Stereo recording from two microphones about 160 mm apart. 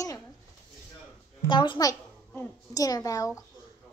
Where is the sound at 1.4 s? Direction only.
30° left (ahead or behind).